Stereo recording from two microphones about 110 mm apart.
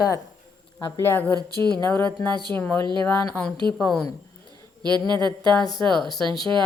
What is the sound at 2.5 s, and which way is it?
Speech, 15° left (ahead or behind).